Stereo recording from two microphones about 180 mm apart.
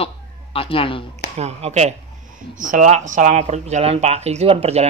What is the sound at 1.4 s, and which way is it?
Speech, 35° right (ahead or behind).